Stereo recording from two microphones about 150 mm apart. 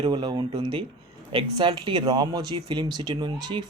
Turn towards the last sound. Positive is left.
turn(degrees=-30)  # may be behind; listen again after turning